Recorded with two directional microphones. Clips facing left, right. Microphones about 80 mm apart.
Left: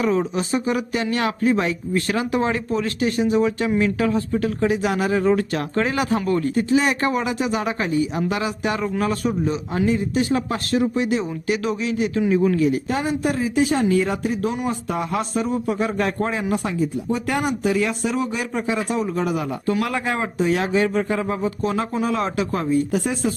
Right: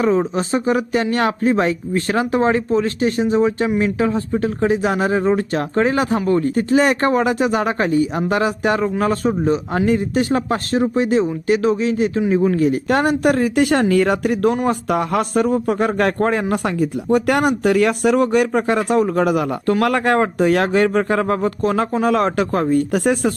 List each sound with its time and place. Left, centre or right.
0.0 s speech: right
12.9 s speech: right
21.6 s speech: right